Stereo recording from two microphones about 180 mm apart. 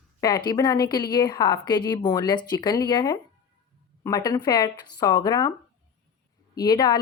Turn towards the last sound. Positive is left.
turn(degrees=20)  # may be behind; listen again after turning